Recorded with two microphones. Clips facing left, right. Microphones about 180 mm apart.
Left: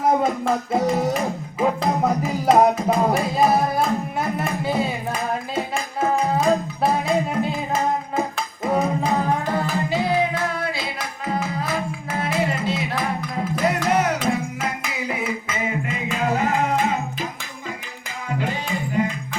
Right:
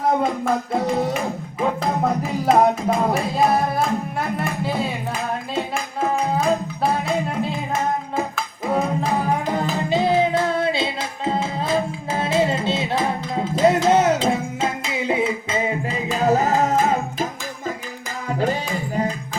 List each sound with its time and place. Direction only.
0.1 s a sound: 5° left (ahead or behind)
3.3 s music: centre (ahead or behind)
8.6 s music: centre (ahead or behind); by 17.2 s 40° right (ahead or behind)
19.0 s music: 40° right (ahead or behind)